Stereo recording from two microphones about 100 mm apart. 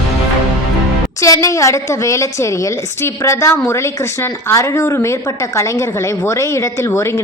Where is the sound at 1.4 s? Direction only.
30° left (ahead or behind).